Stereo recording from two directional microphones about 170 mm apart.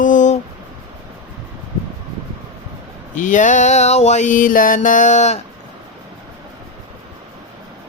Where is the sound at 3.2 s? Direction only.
50° left (ahead or behind).